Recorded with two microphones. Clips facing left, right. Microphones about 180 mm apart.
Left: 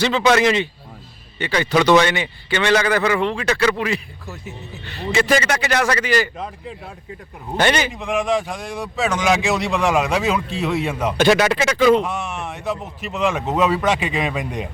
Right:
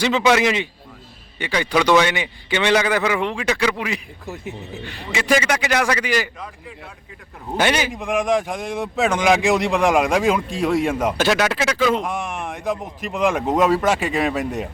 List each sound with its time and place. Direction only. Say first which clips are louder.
0.0 s a man's voice: left 1 dB; 10° right (ahead or behind)
6.3 s speech: left 5 dB; 25° left (ahead or behind)
7.5 s a man's voice: left 1 dB; 10° right (ahead or behind)
12.0 s a man's voice: even; 15° right (ahead or behind)